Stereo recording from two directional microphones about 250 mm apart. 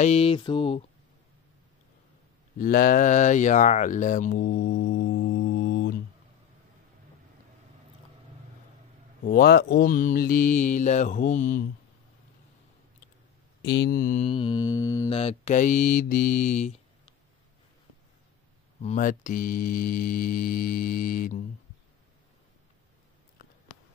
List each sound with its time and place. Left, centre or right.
0.0 s mantra: left
2.6 s speech: left
9.2 s mantra: left
13.6 s mantra: left
18.8 s mantra: left